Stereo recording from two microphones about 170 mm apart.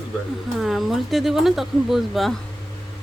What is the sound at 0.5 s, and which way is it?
Speech, centre (ahead or behind).